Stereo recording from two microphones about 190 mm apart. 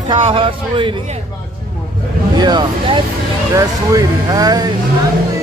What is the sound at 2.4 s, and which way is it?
Speech, 20° right (ahead or behind).